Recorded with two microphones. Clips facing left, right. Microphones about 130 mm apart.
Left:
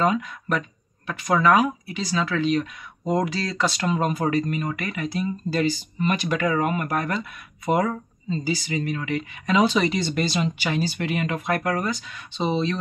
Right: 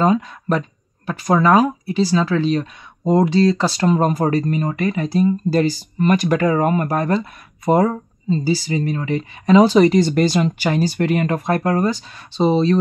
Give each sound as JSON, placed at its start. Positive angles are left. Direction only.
{"t": 0.0, "sound": "speech", "side_deg": -30}